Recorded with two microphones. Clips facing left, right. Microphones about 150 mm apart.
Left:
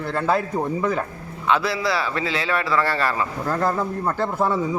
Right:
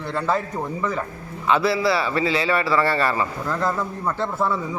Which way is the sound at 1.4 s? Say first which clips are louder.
Right 2 dB; centre (ahead or behind).